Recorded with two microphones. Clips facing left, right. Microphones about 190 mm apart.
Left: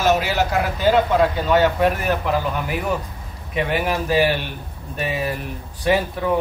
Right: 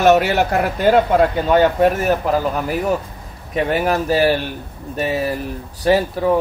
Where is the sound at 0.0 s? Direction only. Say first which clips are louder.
Right 5 dB; 65° right (ahead or behind).